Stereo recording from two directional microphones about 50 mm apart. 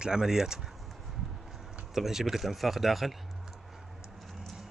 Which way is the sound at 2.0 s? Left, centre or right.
Centre.